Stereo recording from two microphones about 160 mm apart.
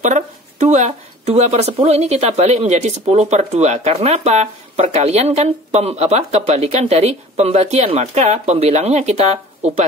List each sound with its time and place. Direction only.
0.0 s speech: 45° right (ahead or behind)